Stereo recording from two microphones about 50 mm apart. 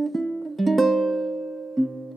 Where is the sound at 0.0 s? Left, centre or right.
Centre.